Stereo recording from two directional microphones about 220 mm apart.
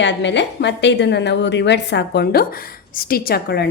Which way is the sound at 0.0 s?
55° left (ahead or behind).